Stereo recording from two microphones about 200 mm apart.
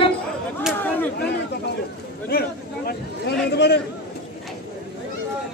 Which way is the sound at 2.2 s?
50° left (ahead or behind).